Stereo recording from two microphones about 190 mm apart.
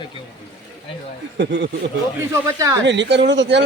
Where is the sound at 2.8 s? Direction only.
70° right (ahead or behind).